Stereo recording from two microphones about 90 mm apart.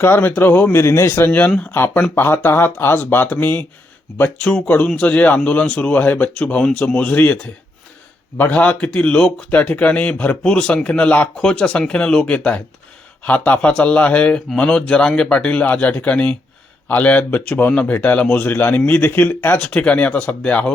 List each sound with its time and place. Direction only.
0.0 s a man's voice: 25° left (ahead or behind)
8.4 s a man's voice: 15° left (ahead or behind)